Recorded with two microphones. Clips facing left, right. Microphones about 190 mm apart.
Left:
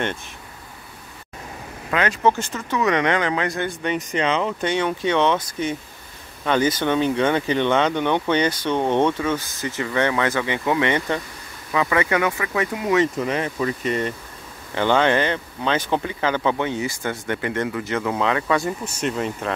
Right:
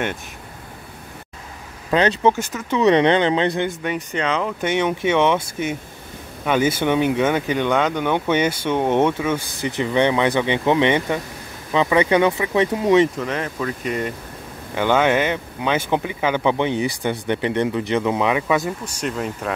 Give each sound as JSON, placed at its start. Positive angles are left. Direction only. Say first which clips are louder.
{"t": 1.9, "sound": "speech", "louder": "right 5 dB", "side_deg": -30}
{"t": 2.2, "sound": "speech", "louder": "right 2 dB", "side_deg": -10}
{"t": 2.8, "sound": "speech", "louder": "right 6 dB", "side_deg": -30}
{"t": 4.2, "sound": "speech", "louder": "even", "side_deg": 0}
{"t": 6.4, "sound": "speech", "louder": "right 1 dB", "side_deg": -10}
{"t": 13.2, "sound": "speech", "louder": "left 1 dB", "side_deg": 5}
{"t": 18.6, "sound": "speech", "louder": "left 1 dB", "side_deg": 0}